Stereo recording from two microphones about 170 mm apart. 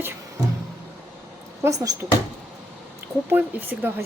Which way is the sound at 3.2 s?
10° right (ahead or behind).